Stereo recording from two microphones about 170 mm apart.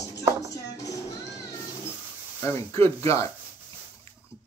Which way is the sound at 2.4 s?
15° left (ahead or behind).